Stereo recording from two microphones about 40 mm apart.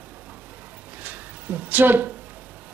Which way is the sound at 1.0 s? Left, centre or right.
Right.